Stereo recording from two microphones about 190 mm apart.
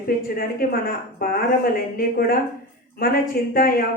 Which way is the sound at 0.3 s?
50° left (ahead or behind).